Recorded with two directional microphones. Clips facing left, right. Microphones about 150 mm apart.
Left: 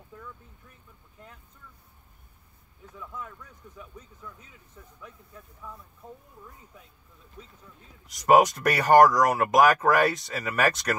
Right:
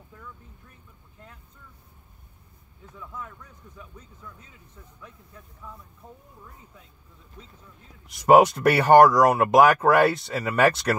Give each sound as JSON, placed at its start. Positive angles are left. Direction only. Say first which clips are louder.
{"t": 8.4, "sound": "speech", "louder": "right 4 dB", "side_deg": -30}